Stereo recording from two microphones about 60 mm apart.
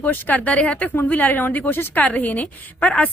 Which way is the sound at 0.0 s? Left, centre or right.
Left.